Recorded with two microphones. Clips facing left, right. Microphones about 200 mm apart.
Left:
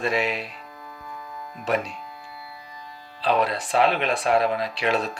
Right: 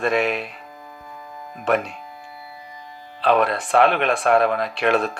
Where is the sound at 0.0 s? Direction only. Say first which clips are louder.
Right 4 dB; 55° right (ahead or behind).